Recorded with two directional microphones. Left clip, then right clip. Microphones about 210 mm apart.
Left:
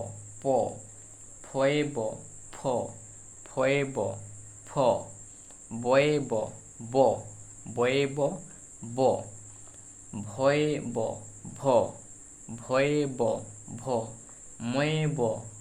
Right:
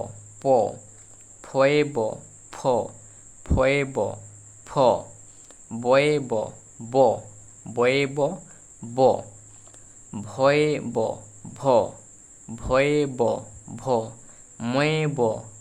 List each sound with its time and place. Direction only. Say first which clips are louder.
0.4 s speech: right 7 dB; 35° right (ahead or behind)
3.4 s speech: right 5 dB; 25° right (ahead or behind)